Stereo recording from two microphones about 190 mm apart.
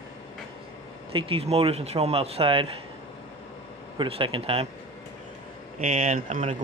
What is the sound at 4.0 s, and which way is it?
Speech, 30° right (ahead or behind).